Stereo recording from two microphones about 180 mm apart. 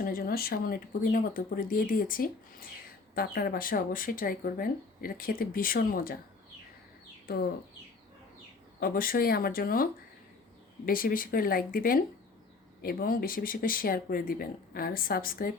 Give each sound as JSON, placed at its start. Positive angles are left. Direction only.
{"t": 0.0, "sound": "speech", "side_deg": 55}
{"t": 7.3, "sound": "speech", "side_deg": 60}
{"t": 8.8, "sound": "speech", "side_deg": 55}